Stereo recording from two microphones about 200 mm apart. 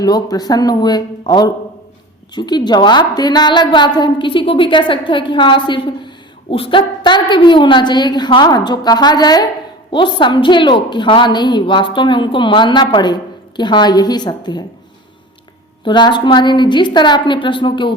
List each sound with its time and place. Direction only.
0.0 s a woman's voice: 20° left (ahead or behind)
15.8 s a woman's voice: 20° left (ahead or behind)